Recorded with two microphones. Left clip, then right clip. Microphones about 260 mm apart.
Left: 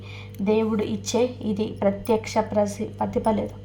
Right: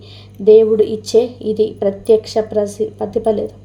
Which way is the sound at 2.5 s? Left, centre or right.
Left.